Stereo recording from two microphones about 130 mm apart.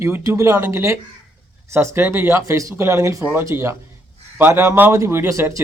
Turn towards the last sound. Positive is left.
turn(degrees=-20)  # may be behind; listen again after turning